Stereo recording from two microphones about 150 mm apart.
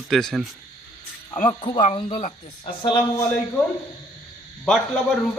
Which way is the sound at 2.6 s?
30° left (ahead or behind).